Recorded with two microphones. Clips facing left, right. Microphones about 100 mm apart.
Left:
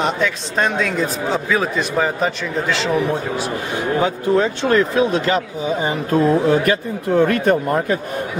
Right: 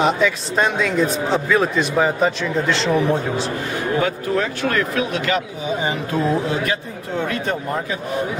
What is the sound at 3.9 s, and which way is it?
A man's voice, 20° left (ahead or behind).